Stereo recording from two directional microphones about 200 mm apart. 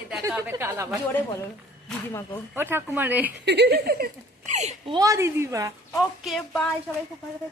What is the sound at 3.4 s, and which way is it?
Speech, 60° right (ahead or behind).